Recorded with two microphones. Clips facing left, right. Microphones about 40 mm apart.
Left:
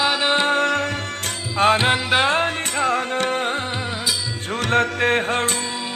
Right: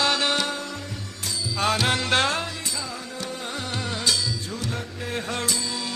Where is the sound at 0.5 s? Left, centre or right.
Left.